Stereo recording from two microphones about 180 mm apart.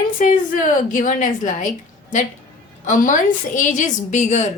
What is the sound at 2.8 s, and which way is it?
Speech, 45° left (ahead or behind).